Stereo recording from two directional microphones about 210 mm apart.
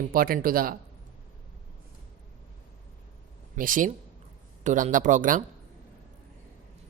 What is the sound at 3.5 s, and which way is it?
Speech, 40° right (ahead or behind).